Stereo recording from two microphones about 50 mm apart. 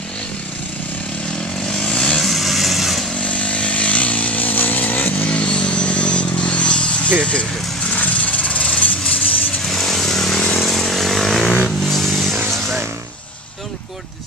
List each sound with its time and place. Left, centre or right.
1.7 s vehicle: centre
3.2 s chainsaw: left
5.2 s vehicle: left
7.9 s a sound: left
9.7 s vehicle: centre